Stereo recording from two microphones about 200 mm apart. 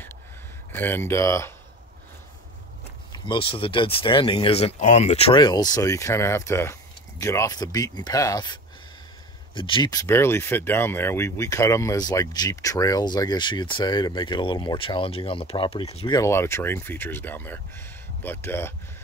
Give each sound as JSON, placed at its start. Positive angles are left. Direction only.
{"t": 0.7, "sound": "speech", "side_deg": 10}
{"t": 3.1, "sound": "speech", "side_deg": 25}
{"t": 16.2, "sound": "speech", "side_deg": 15}